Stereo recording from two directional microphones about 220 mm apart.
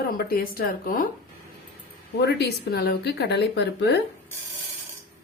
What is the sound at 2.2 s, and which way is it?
Speech, 50° left (ahead or behind).